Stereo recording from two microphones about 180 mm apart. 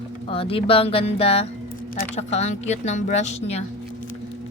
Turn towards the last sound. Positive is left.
turn(degrees=40)  # may be behind; listen again after turning